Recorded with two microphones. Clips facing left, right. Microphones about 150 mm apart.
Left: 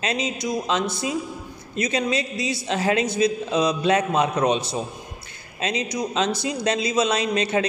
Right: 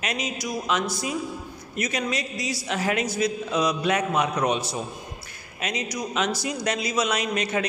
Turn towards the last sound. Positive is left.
turn(degrees=30)  # may be behind; listen again after turning